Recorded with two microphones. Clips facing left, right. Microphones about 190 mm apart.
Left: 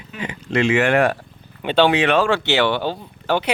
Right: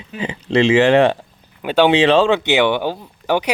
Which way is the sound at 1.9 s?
25° right (ahead or behind).